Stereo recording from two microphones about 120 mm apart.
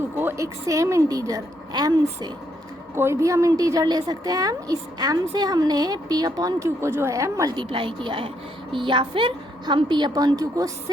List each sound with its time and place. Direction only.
0.2 s a woman's voice: 20° right (ahead or behind)
2.9 s a woman's voice: 20° right (ahead or behind)
7.5 s a woman's voice: 40° right (ahead or behind)